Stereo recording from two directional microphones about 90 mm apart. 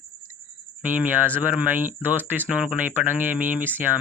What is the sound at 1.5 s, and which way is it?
Speech, 20° right (ahead or behind).